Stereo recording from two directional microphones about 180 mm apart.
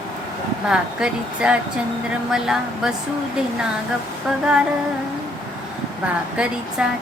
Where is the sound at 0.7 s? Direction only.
5° right (ahead or behind).